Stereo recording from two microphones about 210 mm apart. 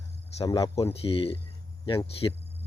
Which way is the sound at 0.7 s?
30° left (ahead or behind).